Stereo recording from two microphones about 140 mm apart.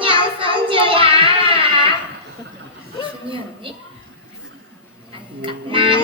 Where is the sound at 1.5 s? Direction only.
40° right (ahead or behind).